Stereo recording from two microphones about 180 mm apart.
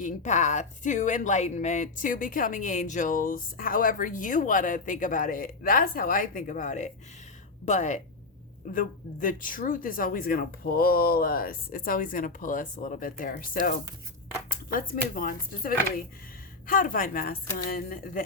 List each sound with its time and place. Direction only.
0.0 s a woman's voice: 40° left (ahead or behind)